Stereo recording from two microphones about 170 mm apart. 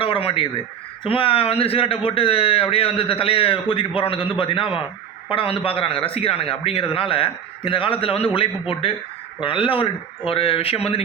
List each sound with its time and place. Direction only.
0.0 s a sound: 30° left (ahead or behind)
1.0 s a man's voice: 30° left (ahead or behind)
9.4 s a man's voice: 30° left (ahead or behind)